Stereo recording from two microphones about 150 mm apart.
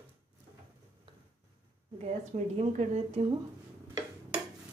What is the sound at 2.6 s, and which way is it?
Speech, 45° right (ahead or behind).